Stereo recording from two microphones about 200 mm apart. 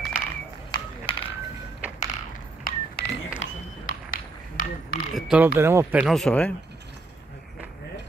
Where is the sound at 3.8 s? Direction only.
40° left (ahead or behind).